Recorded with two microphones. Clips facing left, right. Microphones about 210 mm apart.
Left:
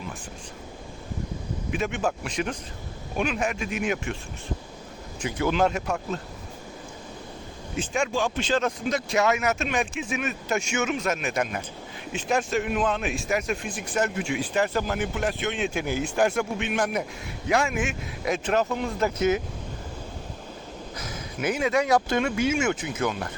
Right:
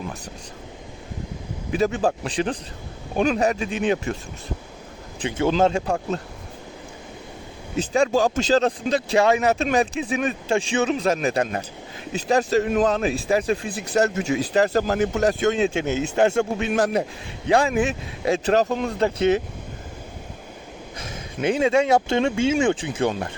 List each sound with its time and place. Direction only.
1.7 s a man's voice: 35° right (ahead or behind)
5.2 s speech: 30° right (ahead or behind)
7.8 s a man's voice: 35° right (ahead or behind)
15.7 s a man's voice: 25° right (ahead or behind)
21.0 s speech: 25° right (ahead or behind)